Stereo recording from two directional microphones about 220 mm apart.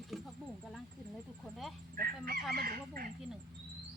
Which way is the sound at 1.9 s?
40° right (ahead or behind).